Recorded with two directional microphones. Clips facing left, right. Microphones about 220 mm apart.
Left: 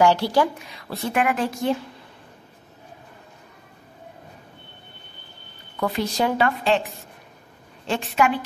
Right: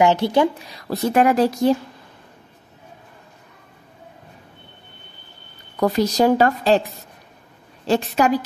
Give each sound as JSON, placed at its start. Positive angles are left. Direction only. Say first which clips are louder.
{"t": 0.0, "sound": "a woman's voice", "louder": "right 2 dB", "side_deg": -20}
{"t": 0.7, "sound": "a woman's voice", "louder": "right 7 dB", "side_deg": -40}
{"t": 5.8, "sound": "a woman's voice", "louder": "right 6 dB", "side_deg": -40}
{"t": 7.8, "sound": "a woman's voice", "louder": "right 4 dB", "side_deg": -40}